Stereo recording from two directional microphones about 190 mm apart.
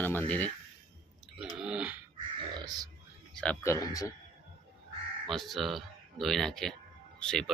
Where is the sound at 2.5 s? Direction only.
20° right (ahead or behind).